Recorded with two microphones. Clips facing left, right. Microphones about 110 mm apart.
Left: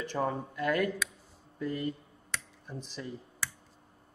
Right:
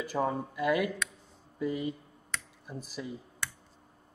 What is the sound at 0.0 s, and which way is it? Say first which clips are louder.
Speech: right 1 dB; 5° right (ahead or behind).